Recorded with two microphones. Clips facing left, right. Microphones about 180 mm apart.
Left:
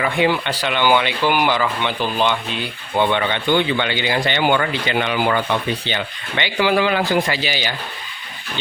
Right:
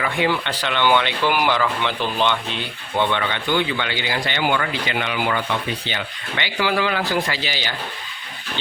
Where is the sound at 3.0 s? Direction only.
20° left (ahead or behind).